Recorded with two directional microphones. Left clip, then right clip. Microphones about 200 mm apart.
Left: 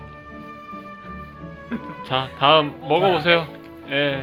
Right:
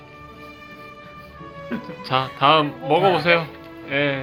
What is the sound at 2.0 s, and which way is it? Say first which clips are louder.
Speech: right 1 dB; 5° left (ahead or behind).